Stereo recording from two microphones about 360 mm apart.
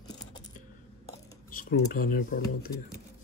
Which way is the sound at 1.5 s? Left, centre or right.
Left.